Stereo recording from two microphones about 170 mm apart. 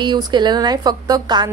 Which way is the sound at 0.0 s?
25° right (ahead or behind).